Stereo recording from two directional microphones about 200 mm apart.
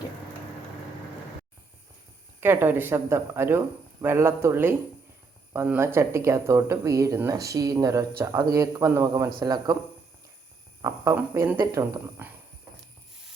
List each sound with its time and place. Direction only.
2.4 s a man's voice: 10° right (ahead or behind)
10.8 s speech: 15° right (ahead or behind)